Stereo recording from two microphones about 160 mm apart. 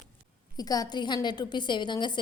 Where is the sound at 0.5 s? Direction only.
25° left (ahead or behind).